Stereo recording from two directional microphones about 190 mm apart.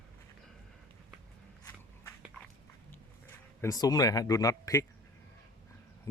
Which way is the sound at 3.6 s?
20° left (ahead or behind).